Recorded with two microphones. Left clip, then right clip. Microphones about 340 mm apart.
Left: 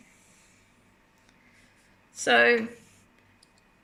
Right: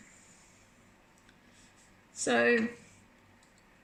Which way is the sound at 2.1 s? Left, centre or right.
Left.